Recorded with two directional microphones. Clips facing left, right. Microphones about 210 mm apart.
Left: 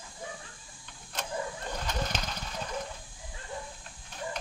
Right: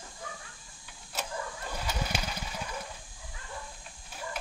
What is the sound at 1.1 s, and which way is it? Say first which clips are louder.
Printer: right 1 dB; 5° right (ahead or behind).